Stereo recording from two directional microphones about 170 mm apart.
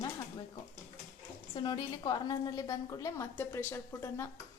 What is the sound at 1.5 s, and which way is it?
A woman's voice, 25° left (ahead or behind).